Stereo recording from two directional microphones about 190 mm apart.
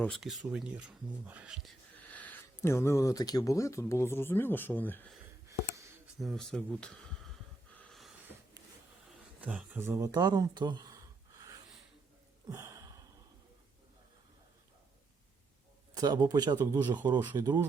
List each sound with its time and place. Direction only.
0.0 s speech: centre (ahead or behind)
6.1 s speech: centre (ahead or behind)
7.8 s a sound: centre (ahead or behind)
9.4 s speech: 5° right (ahead or behind)
12.5 s a sound: 15° right (ahead or behind)
16.0 s speech: 20° right (ahead or behind)